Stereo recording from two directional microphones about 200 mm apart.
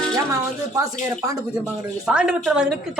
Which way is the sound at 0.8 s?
15° right (ahead or behind).